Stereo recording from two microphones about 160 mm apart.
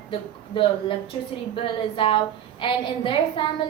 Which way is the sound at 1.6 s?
30° left (ahead or behind).